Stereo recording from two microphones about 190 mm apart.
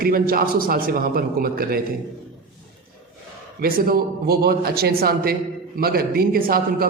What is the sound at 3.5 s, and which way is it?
A man's voice, 50° right (ahead or behind).